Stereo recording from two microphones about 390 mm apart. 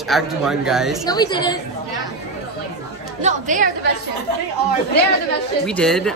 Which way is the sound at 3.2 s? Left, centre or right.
Centre.